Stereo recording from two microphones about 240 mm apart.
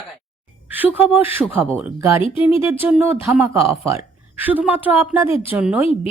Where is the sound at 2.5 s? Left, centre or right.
Centre.